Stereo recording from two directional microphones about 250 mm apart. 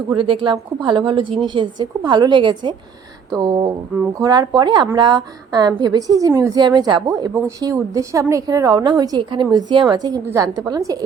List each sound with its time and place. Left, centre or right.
0.1 s a woman's voice: centre